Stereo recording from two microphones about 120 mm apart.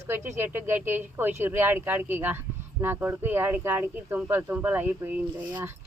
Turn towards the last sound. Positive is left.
turn(degrees=-15)  # may be behind; listen again after turning